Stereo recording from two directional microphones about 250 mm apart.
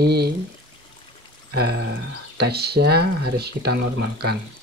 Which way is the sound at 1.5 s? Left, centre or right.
Right.